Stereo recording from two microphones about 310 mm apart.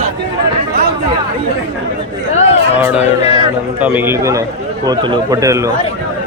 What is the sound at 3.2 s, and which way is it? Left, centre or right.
Speech, centre.